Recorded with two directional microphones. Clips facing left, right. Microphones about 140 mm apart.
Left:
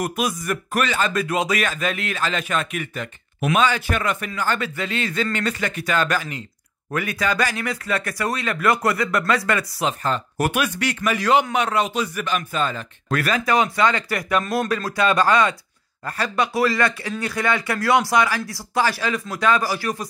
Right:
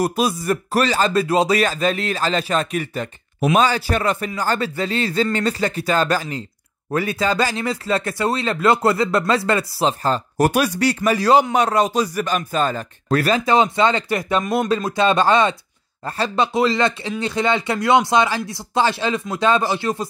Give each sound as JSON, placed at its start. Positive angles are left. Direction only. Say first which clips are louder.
{"t": 0.0, "sound": "speech", "louder": "right 4 dB", "side_deg": -30}